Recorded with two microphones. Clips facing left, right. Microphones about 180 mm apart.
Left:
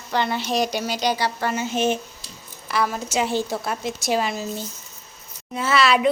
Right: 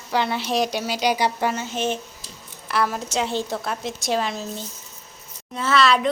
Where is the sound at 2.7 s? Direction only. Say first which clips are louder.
Even; centre (ahead or behind).